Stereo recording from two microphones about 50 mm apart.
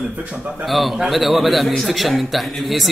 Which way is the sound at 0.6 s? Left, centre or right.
Centre.